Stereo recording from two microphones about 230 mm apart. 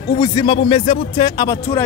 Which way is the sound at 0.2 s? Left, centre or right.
Centre.